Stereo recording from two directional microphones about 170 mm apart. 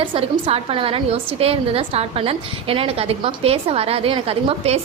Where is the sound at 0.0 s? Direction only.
30° right (ahead or behind).